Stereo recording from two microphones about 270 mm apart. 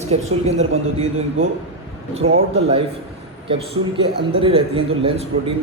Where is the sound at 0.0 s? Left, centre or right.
Right.